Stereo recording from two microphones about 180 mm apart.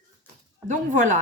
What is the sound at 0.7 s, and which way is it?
Speech, 45° right (ahead or behind).